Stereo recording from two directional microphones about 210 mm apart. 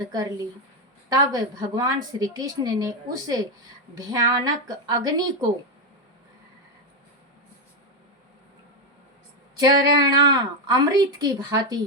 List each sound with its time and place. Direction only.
0.0 s a woman's voice: 20° right (ahead or behind)
9.6 s a woman's voice: 20° right (ahead or behind)